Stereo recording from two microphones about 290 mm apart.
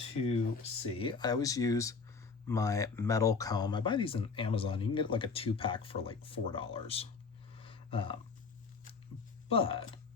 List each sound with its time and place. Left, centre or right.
0.5 s speech: centre
7.6 s a sound: centre
9.5 s speech: centre